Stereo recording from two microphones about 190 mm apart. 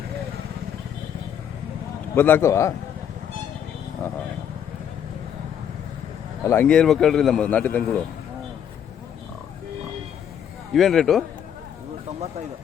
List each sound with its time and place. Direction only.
2.1 s speech: 10° left (ahead or behind)
6.4 s a man's voice: 10° left (ahead or behind)
10.7 s a man's voice: centre (ahead or behind)